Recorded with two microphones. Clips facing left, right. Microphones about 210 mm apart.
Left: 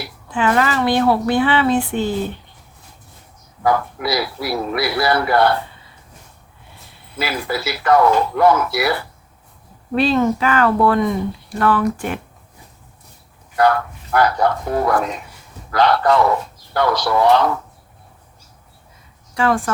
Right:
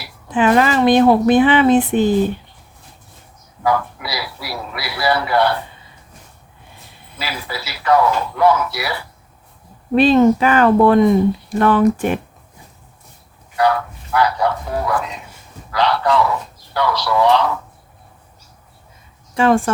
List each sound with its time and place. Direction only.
0.3 s speech: 20° right (ahead or behind)
3.6 s speech: 50° left (ahead or behind)
7.2 s speech: 50° left (ahead or behind)
9.9 s speech: 20° right (ahead or behind)
13.6 s speech: 50° left (ahead or behind)
19.3 s speech: 20° right (ahead or behind)